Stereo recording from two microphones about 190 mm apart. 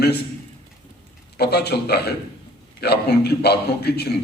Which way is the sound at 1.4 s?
60° left (ahead or behind).